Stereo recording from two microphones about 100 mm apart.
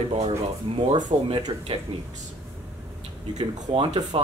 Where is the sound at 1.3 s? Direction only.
55° right (ahead or behind).